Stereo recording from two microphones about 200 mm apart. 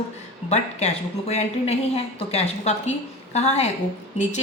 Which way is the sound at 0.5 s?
35° left (ahead or behind).